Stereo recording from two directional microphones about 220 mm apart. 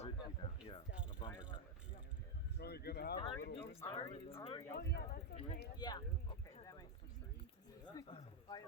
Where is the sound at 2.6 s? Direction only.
45° left (ahead or behind).